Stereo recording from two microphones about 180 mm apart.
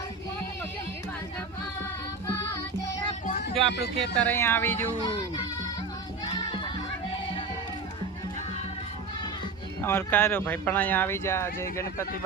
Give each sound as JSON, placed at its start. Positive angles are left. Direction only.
{"t": 3.7, "sound": "speech", "side_deg": 75}
{"t": 4.2, "sound": "speech", "side_deg": 10}
{"t": 9.8, "sound": "speech", "side_deg": 10}